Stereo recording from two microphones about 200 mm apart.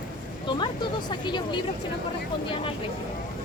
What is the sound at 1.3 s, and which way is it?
Speech, 20° left (ahead or behind).